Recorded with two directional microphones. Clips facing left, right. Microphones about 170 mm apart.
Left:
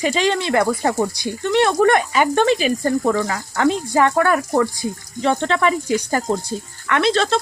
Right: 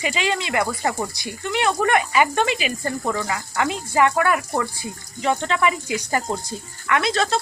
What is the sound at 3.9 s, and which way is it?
Speech, 5° right (ahead or behind).